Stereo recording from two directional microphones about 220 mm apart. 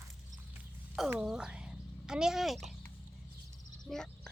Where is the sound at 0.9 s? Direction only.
Centre (ahead or behind).